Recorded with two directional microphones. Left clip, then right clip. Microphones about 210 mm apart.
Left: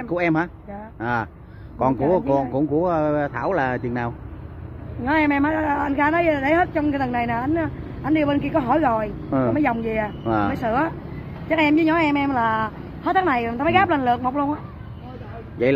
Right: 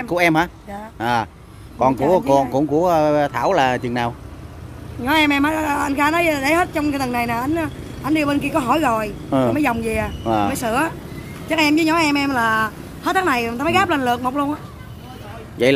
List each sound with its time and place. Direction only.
0.0 s speech: 20° right (ahead or behind)
15.6 s speech: 20° right (ahead or behind)